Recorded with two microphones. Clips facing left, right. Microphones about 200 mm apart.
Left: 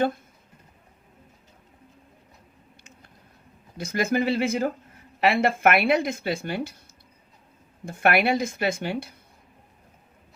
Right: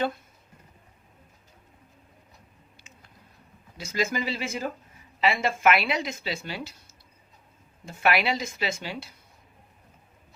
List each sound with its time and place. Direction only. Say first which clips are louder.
3.8 s speech: left 5 dB; 55° left (ahead or behind)
7.9 s speech: left 4 dB; 55° left (ahead or behind)